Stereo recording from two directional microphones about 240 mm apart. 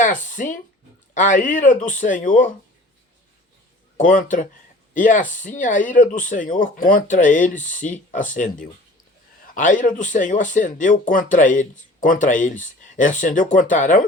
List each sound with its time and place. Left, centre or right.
0.0 s speech: left
3.9 s speech: left